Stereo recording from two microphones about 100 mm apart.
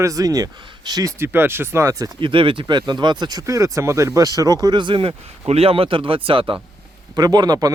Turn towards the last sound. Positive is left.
turn(degrees=-40)  # may be behind; listen again after turning